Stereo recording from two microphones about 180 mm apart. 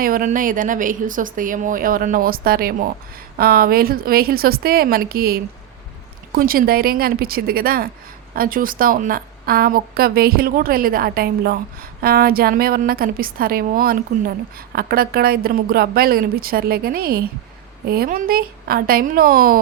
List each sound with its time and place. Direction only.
0.0 s a woman's voice: 50° right (ahead or behind)